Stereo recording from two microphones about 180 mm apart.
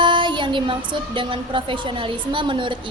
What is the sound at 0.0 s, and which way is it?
A woman's voice, 25° right (ahead or behind).